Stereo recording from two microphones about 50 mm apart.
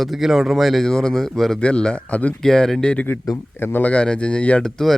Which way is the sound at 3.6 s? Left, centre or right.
Left.